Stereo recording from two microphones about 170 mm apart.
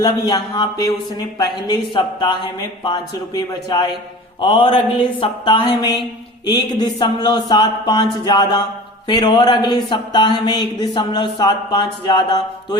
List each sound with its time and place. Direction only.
0.0 s speech: 25° left (ahead or behind)